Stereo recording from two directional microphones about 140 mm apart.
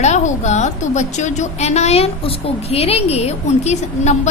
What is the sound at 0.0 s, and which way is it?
A woman's voice, 55° left (ahead or behind).